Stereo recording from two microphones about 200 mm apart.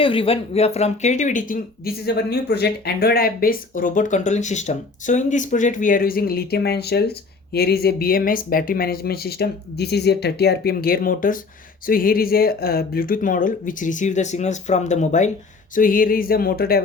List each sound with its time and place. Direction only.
0.0 s speech: 25° left (ahead or behind); by 16.8 s 50° left (ahead or behind)